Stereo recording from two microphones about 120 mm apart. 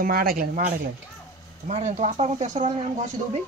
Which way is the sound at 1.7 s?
75° right (ahead or behind).